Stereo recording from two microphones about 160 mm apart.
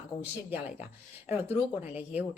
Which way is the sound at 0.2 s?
10° right (ahead or behind).